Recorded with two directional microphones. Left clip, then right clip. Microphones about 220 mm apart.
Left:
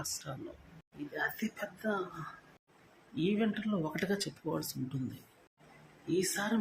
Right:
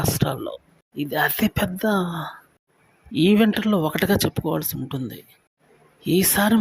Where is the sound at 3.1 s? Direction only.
45° right (ahead or behind).